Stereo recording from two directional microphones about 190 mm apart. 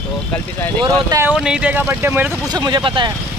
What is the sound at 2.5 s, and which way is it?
Speech, 20° right (ahead or behind).